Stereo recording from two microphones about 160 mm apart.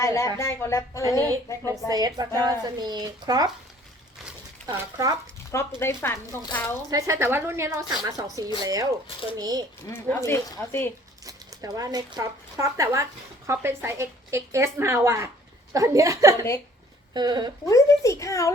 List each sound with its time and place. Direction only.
0.0 s a child's voice: 20° left (ahead or behind)
1.9 s speech: 25° right (ahead or behind)
4.6 s speech: 20° right (ahead or behind)
5.5 s a woman's voice: 15° left (ahead or behind)
6.9 s speech: 15° right (ahead or behind)
9.9 s a woman's voice: 15° left (ahead or behind)
11.3 s speech: 20° right (ahead or behind)
17.7 s a child's voice: 20° left (ahead or behind)